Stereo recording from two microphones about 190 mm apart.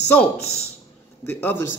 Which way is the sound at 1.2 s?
10° left (ahead or behind).